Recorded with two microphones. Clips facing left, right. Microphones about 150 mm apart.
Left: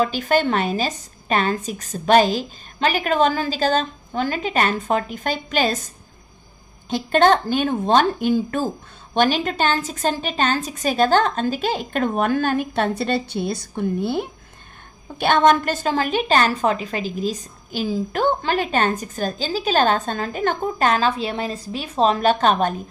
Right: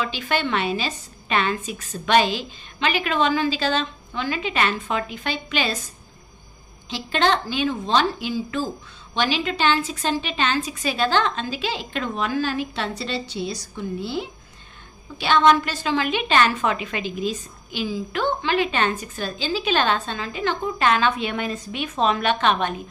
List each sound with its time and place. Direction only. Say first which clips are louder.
0.0 s a woman's voice: left 6 dB; 45° left (ahead or behind)
6.9 s a woman's voice: left 6 dB; 45° left (ahead or behind)